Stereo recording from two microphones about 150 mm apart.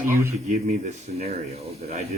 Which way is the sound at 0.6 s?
50° right (ahead or behind).